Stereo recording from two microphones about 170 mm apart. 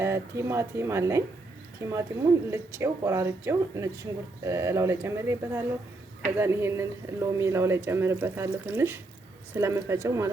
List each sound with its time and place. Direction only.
0.0 s a woman's voice: 15° right (ahead or behind)